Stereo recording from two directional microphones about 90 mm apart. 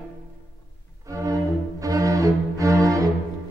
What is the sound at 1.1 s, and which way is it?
Cello, 40° right (ahead or behind).